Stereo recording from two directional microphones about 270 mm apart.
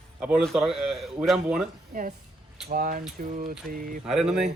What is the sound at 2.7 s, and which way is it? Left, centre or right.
Speech, right.